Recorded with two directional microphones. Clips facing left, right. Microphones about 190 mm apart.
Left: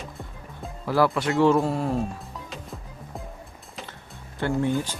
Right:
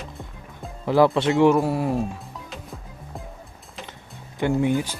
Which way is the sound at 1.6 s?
10° right (ahead or behind).